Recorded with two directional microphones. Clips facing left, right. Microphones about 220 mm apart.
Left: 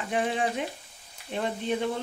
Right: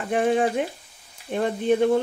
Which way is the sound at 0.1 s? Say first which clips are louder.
Right 7 dB; 45° right (ahead or behind).